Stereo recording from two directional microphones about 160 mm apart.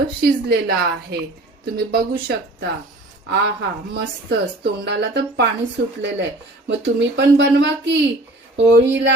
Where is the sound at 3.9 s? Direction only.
90° right.